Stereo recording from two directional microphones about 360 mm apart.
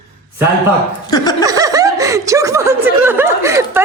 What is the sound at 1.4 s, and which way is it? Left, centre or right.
Speech, centre.